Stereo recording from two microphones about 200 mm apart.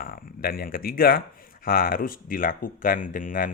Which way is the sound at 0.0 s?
45° left (ahead or behind).